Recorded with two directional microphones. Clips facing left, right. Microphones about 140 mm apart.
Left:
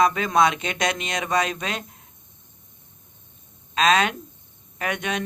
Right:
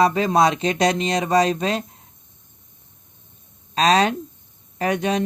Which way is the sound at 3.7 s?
35° right (ahead or behind).